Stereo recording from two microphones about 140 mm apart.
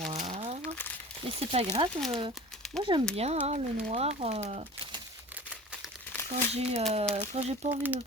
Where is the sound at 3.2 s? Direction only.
50° right (ahead or behind).